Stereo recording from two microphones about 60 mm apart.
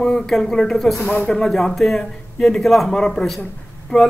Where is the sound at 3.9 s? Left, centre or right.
Left.